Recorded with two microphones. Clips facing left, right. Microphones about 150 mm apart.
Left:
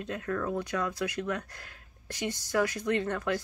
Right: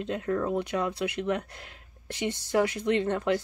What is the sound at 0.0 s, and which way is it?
Speech, 25° right (ahead or behind).